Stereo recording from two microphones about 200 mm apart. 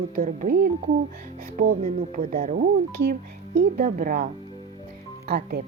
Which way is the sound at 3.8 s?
40° right (ahead or behind).